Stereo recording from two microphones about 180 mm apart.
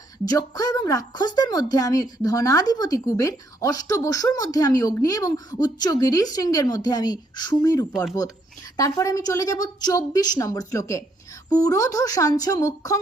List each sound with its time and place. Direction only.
0.3 s a woman's voice: 20° left (ahead or behind)